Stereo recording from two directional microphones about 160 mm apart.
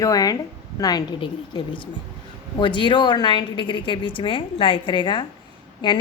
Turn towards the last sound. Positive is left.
turn(degrees=30)  # may be behind; listen again after turning